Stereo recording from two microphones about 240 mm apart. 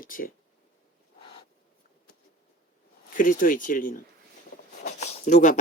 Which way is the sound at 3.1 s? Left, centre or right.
Left.